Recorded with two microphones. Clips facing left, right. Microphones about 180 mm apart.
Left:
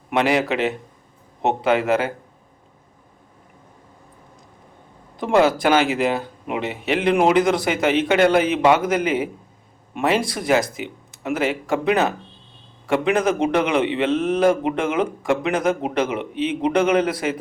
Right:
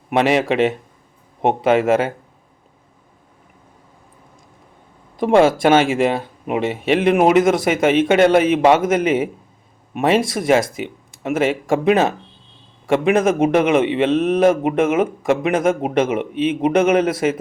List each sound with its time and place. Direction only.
0.1 s speech: 20° right (ahead or behind)
5.2 s speech: 25° right (ahead or behind)